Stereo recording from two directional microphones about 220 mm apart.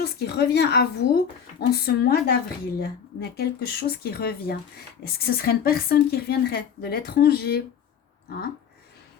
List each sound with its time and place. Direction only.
0.0 s a woman's voice: 45° left (ahead or behind)